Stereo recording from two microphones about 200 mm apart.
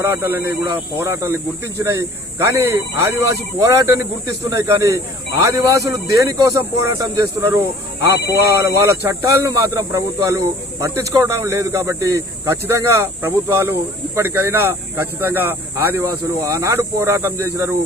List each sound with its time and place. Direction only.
0.0 s speech: 10° right (ahead or behind)